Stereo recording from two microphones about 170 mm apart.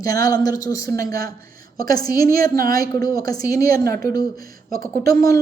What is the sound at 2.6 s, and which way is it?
Speech, 20° left (ahead or behind).